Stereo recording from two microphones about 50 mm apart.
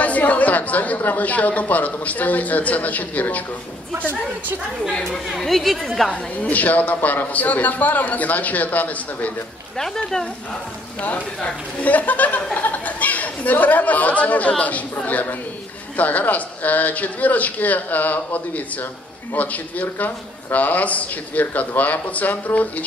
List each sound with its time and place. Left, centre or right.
0.0 s speech: left
5.4 s a woman's voice: centre
6.5 s speech: left
11.0 s speech: left